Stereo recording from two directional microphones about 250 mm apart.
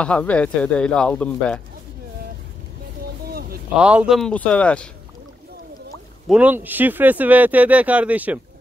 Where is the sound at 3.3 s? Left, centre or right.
Right.